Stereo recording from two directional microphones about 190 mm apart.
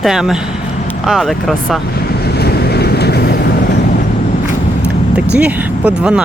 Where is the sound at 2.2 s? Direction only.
55° left (ahead or behind).